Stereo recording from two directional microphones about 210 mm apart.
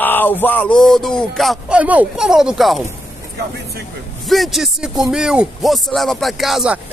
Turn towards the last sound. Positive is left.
turn(degrees=0)  # may be behind; listen again after turning